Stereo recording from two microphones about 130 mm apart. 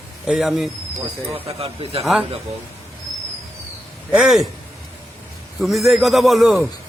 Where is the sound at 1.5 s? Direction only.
45° right (ahead or behind).